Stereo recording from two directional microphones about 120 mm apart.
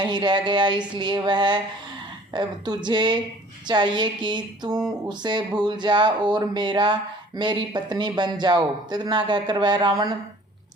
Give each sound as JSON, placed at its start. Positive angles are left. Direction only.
{"t": 0.0, "sound": "speech", "side_deg": -40}